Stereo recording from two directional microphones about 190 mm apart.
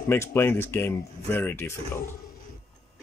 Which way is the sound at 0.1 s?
10° left (ahead or behind).